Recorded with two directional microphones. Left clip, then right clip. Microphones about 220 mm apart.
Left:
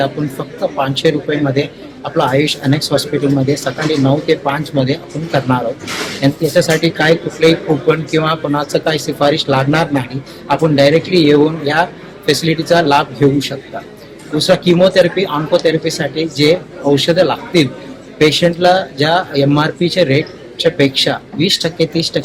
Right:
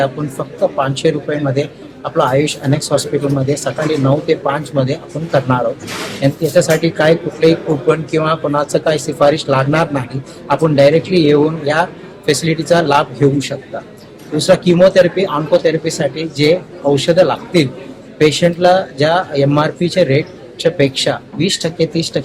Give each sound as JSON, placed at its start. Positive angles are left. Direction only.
{"t": 0.8, "sound": "speech", "side_deg": 5}